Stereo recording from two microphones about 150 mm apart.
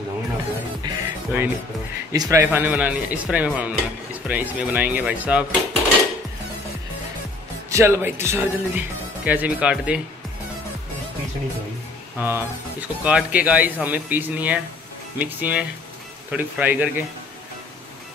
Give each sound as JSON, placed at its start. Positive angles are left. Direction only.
{"t": 0.8, "sound": "music", "side_deg": -20}
{"t": 2.1, "sound": "a man's voice", "side_deg": -20}
{"t": 2.5, "sound": "speech", "side_deg": -10}
{"t": 7.7, "sound": "speech", "side_deg": -15}
{"t": 12.2, "sound": "speech", "side_deg": -15}